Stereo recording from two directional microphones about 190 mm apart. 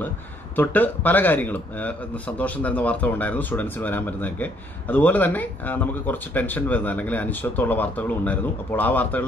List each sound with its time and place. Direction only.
0.6 s speech: 10° left (ahead or behind)